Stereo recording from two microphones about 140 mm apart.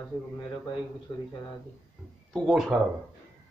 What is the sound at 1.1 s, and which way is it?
Speech, 30° left (ahead or behind).